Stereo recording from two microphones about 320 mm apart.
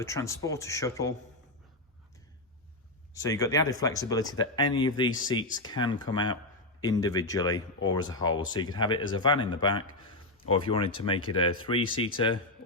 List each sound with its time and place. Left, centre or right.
0.0 s speech: centre
3.2 s speech: centre